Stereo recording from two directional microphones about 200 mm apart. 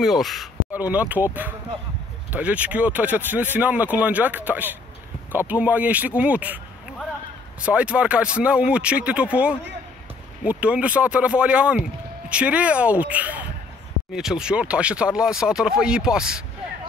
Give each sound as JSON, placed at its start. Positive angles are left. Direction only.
{"t": 0.0, "sound": "speech", "side_deg": 0}
{"t": 7.6, "sound": "speech", "side_deg": -5}